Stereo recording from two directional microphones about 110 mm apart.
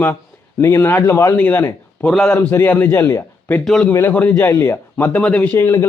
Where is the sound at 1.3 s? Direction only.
15° left (ahead or behind).